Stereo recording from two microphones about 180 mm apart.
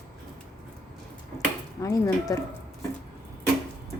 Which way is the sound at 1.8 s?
20° left (ahead or behind).